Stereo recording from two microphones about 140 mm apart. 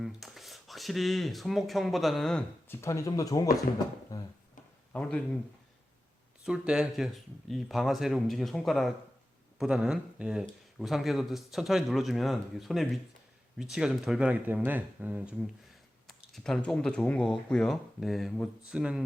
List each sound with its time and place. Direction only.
0.0 s speech: centre (ahead or behind)
2.6 s speech: 20° left (ahead or behind)
4.9 s speech: 10° left (ahead or behind)
6.4 s speech: 5° right (ahead or behind)
16.0 s speech: centre (ahead or behind)